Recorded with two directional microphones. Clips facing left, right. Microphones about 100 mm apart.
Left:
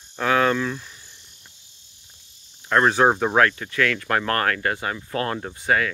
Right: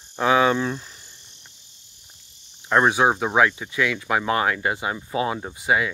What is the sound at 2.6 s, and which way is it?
Speech, 15° right (ahead or behind).